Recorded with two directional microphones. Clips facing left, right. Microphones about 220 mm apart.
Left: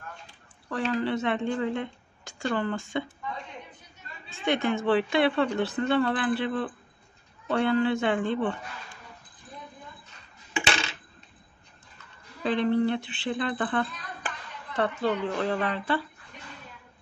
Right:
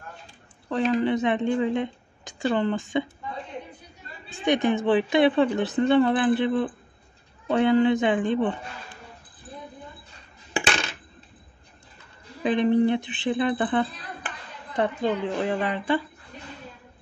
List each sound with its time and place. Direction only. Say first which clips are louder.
0.7 s a woman's voice: right 5 dB; 20° right (ahead or behind)
4.5 s speech: right 3 dB; 20° right (ahead or behind)
12.4 s speech: right 4 dB; 15° right (ahead or behind)